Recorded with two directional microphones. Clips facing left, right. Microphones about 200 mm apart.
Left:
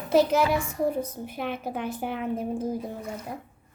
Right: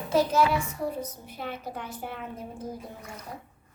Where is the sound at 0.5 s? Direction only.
50° left (ahead or behind).